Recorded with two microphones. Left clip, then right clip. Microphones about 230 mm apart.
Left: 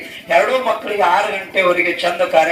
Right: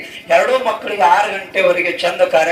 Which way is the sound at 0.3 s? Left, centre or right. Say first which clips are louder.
Right 1 dB; right.